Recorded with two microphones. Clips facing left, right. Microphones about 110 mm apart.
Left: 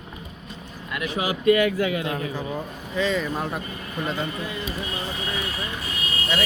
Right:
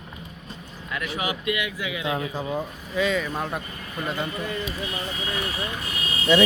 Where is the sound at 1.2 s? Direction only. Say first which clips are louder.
Left 10 dB; 35° left (ahead or behind).